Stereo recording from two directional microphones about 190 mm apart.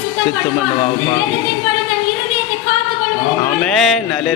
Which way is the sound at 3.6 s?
Centre (ahead or behind).